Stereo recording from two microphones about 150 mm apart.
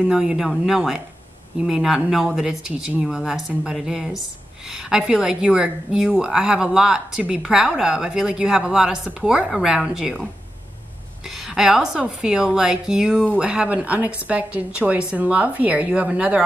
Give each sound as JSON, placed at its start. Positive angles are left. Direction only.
{"t": 0.0, "sound": "speech", "side_deg": -5}
{"t": 11.2, "sound": "a woman's voice", "side_deg": 0}